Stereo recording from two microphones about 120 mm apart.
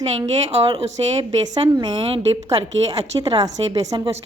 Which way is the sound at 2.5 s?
30° right (ahead or behind).